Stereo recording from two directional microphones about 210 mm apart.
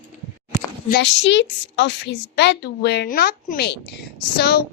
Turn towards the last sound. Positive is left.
turn(degrees=50)  # may be behind; listen again after turning